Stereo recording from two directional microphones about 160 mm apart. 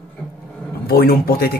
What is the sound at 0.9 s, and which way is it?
Speech, 70° left (ahead or behind).